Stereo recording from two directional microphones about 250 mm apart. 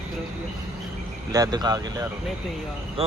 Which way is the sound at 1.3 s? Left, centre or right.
Centre.